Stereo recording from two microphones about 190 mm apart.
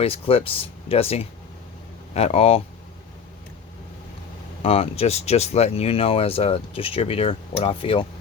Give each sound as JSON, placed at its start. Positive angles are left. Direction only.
{"t": 0.0, "sound": "speech", "side_deg": 30}
{"t": 4.6, "sound": "speech", "side_deg": 30}